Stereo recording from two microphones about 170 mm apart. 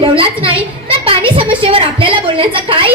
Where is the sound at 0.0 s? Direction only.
30° right (ahead or behind).